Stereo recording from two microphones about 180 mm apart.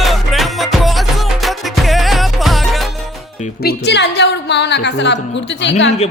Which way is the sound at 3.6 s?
65° left (ahead or behind).